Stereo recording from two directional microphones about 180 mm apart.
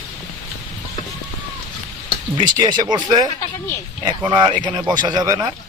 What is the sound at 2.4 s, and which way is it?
Speech, 25° right (ahead or behind).